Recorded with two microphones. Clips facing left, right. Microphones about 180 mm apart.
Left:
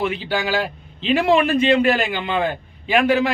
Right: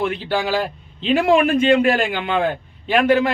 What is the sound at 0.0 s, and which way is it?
A man's voice, 5° left (ahead or behind).